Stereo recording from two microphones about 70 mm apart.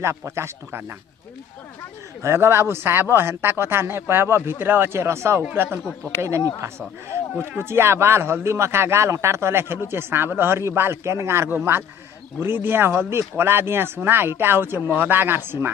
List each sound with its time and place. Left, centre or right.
0.0 s speech: right
2.2 s speech: right